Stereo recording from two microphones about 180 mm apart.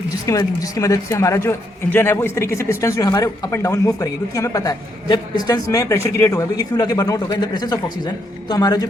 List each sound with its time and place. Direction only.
0.3 s a man's voice: 20° left (ahead or behind)